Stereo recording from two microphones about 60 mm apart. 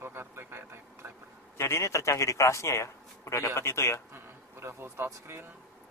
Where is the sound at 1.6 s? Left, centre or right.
Left.